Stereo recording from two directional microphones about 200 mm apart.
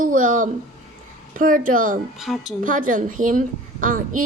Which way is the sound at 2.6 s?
40° right (ahead or behind).